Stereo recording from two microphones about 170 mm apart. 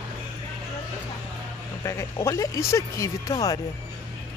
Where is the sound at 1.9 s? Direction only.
15° left (ahead or behind).